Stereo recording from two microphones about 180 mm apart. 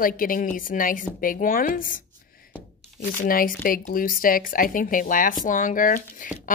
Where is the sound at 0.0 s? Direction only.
50° left (ahead or behind).